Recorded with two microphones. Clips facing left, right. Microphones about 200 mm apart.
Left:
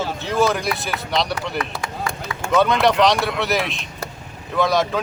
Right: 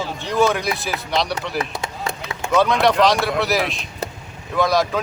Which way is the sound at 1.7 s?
20° right (ahead or behind).